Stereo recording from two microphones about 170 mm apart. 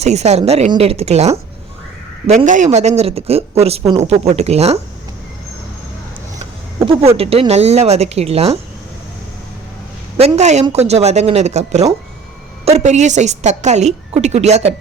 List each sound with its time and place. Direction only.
0.0 s speech: 40° right (ahead or behind)
6.7 s speech: 30° right (ahead or behind)
10.2 s a woman's voice: 40° right (ahead or behind)